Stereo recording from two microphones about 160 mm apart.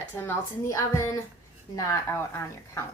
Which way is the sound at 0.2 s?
15° left (ahead or behind).